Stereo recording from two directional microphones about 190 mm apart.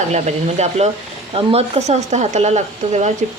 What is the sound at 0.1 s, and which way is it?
Speech, 35° right (ahead or behind).